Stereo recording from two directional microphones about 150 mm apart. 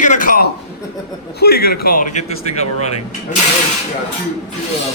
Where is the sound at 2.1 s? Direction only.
50° left (ahead or behind).